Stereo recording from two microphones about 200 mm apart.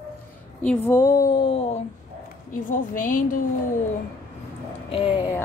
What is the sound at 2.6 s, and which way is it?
Speech, 40° left (ahead or behind).